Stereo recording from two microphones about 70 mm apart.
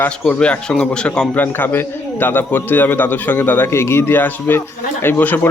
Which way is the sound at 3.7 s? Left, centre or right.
Left.